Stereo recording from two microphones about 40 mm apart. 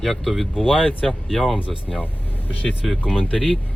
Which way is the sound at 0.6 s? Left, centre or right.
Centre.